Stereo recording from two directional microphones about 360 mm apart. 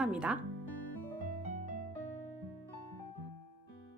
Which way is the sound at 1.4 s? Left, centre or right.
Centre.